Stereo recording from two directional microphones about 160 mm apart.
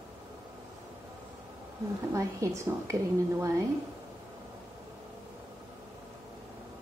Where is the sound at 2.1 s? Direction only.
20° right (ahead or behind).